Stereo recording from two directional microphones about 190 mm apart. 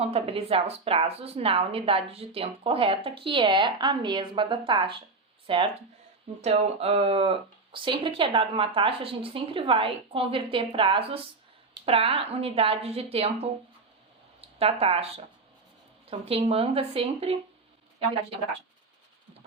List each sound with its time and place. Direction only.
0.0 s a woman's voice: 30° right (ahead or behind)
14.6 s a woman's voice: 30° right (ahead or behind)